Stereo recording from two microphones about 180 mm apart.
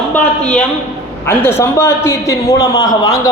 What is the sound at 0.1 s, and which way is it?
A woman's voice, 5° left (ahead or behind).